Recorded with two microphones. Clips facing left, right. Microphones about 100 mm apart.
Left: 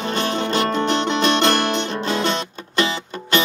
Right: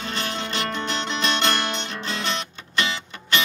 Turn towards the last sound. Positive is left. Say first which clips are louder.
# left 5 dB
turn(degrees=40)  # may be behind; listen again after turning